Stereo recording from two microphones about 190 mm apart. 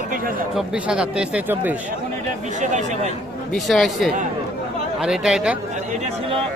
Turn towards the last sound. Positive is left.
turn(degrees=-5)  # may be behind; listen again after turning